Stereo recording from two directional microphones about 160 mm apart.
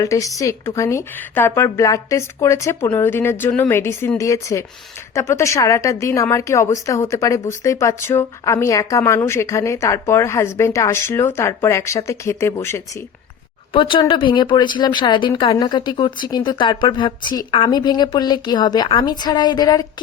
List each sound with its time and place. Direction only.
0.0 s a woman's voice: 20° left (ahead or behind)
13.7 s speech: 30° left (ahead or behind)